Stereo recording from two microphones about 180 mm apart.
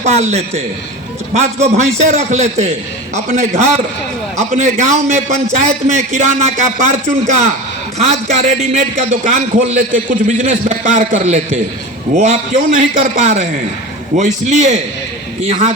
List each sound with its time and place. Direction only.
0.0 s a man's voice: 40° right (ahead or behind)